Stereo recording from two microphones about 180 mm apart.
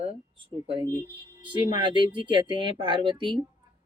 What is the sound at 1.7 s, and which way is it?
Speech, 25° right (ahead or behind).